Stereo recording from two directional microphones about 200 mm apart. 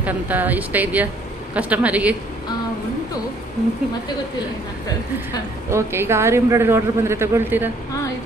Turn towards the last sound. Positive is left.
turn(degrees=-10)  # may be behind; listen again after turning